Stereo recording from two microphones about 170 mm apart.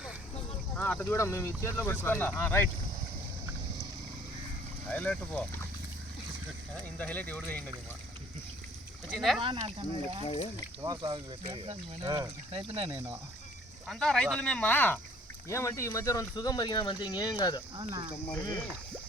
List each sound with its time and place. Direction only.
0.8 s speech: 10° left (ahead or behind)
4.9 s speech: 5° left (ahead or behind)
7.0 s speech: 10° left (ahead or behind)
9.0 s speech: centre (ahead or behind)
9.4 s speech: 35° right (ahead or behind)
10.2 s speech: 35° left (ahead or behind)
10.8 s speech: 25° right (ahead or behind)
13.8 s speech: centre (ahead or behind); by 17.6 s 25° left (ahead or behind)
17.7 s speech: 25° right (ahead or behind)
18.3 s speech: 25° left (ahead or behind)